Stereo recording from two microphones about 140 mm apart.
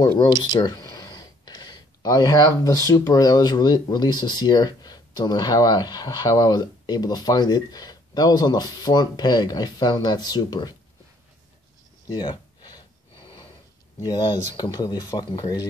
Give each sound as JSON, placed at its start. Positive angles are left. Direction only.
{"t": 0.2, "sound": "speech", "side_deg": 30}
{"t": 12.1, "sound": "a sound", "side_deg": 30}
{"t": 13.9, "sound": "speech", "side_deg": 30}